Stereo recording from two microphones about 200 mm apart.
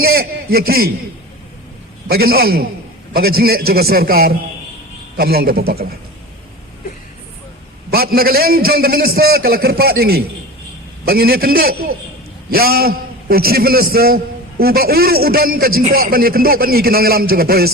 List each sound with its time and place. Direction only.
0.0 s a man's voice: 50° right (ahead or behind)
2.0 s a man's voice: 50° right (ahead or behind)
7.9 s a man's voice: 50° right (ahead or behind)